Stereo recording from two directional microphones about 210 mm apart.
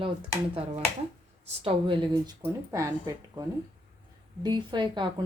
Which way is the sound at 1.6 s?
25° right (ahead or behind).